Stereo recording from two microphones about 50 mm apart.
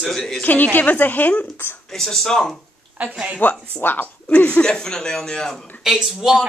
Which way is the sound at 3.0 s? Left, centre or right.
Right.